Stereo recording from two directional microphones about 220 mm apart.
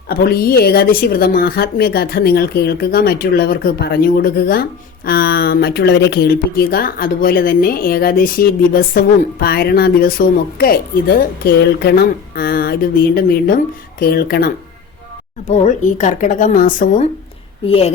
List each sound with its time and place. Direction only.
0.1 s speech: 45° left (ahead or behind)
17.7 s a woman's voice: 25° left (ahead or behind)